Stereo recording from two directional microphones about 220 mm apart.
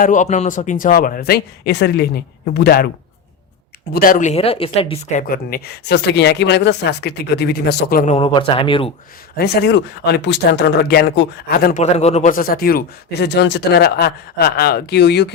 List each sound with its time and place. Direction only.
0.0 s speech: 35° left (ahead or behind)
3.9 s speech: 40° left (ahead or behind)
5.3 s speech: 45° left (ahead or behind)
8.1 s speech: 20° left (ahead or behind)
9.4 s speech: 50° left (ahead or behind)